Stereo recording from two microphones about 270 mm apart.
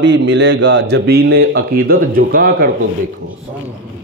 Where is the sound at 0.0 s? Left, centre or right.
Right.